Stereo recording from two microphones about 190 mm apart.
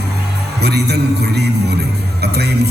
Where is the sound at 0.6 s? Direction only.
60° right (ahead or behind).